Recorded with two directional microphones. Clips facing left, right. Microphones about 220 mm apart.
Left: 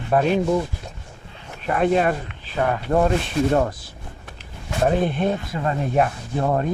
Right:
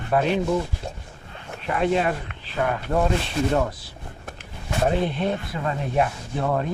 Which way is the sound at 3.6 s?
50° left (ahead or behind).